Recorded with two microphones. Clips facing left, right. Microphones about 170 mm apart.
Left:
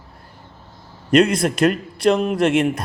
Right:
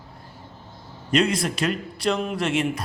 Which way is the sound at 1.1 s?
50° left (ahead or behind).